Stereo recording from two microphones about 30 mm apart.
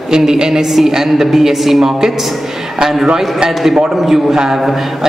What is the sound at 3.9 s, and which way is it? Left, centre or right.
Speech, centre.